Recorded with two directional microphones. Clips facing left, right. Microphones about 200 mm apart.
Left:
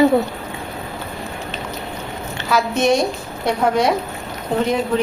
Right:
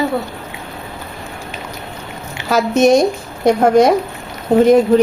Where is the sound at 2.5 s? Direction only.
45° right (ahead or behind).